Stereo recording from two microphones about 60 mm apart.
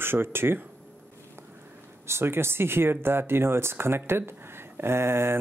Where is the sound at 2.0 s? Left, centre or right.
Right.